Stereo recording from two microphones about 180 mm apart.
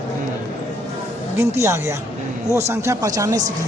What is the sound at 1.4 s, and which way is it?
A man's voice, 15° right (ahead or behind).